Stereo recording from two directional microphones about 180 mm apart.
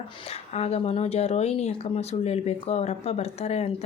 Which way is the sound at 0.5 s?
35° left (ahead or behind).